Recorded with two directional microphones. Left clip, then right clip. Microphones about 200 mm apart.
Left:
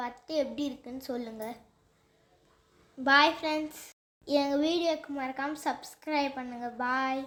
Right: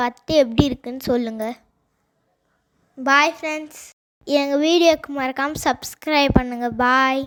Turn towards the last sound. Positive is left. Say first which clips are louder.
# right 13 dB
turn(degrees=-50)  # may be behind; listen again after turning